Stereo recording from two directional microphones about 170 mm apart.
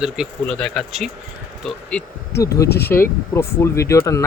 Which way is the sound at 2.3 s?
15° left (ahead or behind).